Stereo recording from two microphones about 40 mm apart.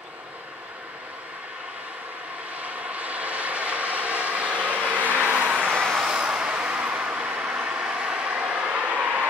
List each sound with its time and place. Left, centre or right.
2.6 s vehicle: right
6.1 s vehicle: right